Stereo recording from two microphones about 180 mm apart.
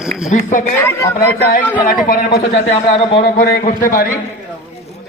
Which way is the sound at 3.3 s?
55° left (ahead or behind).